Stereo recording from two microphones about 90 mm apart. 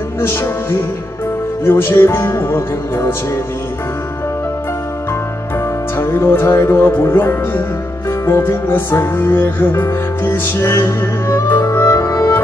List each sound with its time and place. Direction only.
0.2 s music: 25° left (ahead or behind)
5.9 s music: 20° left (ahead or behind)